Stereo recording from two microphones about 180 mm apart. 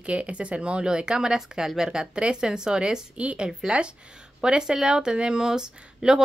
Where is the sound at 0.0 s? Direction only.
5° right (ahead or behind).